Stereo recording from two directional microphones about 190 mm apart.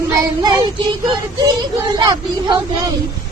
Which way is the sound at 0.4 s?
25° right (ahead or behind).